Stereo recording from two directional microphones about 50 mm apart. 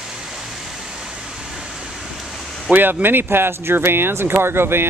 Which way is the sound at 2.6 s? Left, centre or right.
Right.